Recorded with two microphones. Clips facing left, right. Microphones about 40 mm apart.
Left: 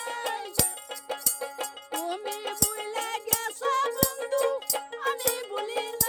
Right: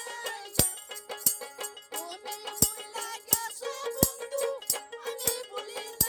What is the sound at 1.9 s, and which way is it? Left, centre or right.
Music, left.